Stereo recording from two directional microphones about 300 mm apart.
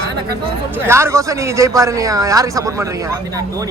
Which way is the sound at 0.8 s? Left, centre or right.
Centre.